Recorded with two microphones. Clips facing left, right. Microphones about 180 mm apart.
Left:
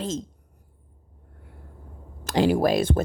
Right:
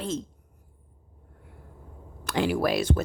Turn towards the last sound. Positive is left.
turn(degrees=50)  # may be behind; listen again after turning